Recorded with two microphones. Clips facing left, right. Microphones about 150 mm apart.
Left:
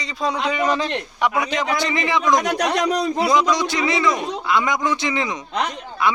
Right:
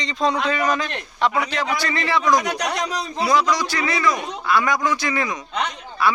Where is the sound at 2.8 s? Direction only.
60° left (ahead or behind).